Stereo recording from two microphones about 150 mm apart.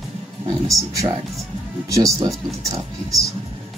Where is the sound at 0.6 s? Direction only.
20° right (ahead or behind).